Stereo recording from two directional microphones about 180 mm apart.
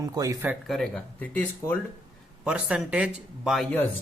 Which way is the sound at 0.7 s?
5° left (ahead or behind).